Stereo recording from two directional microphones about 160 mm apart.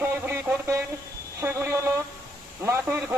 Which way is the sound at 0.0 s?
15° right (ahead or behind).